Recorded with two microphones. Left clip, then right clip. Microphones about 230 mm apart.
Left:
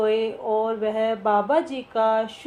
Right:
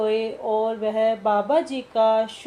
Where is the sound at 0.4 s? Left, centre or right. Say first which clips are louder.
Right 2 dB; left.